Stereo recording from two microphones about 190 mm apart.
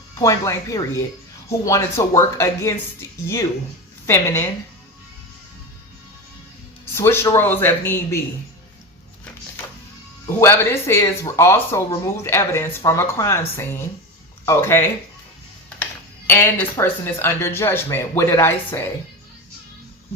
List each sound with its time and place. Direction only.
0.2 s speech: 15° left (ahead or behind)
6.9 s speech: 10° left (ahead or behind)
10.2 s speech: 10° left (ahead or behind)
16.3 s speech: 10° left (ahead or behind)